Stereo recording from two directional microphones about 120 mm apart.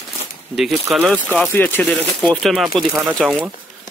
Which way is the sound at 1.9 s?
5° left (ahead or behind).